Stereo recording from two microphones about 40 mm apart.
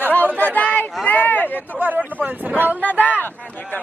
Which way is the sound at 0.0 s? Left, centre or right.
Left.